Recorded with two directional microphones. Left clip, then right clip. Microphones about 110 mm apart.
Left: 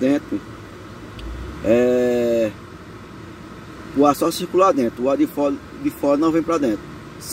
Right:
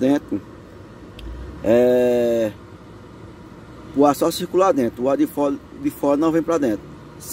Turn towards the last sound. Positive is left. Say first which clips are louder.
# even
turn(degrees=-15)  # may be behind; listen again after turning